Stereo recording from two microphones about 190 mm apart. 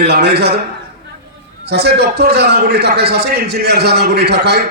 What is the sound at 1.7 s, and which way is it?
A man's voice, 60° right (ahead or behind).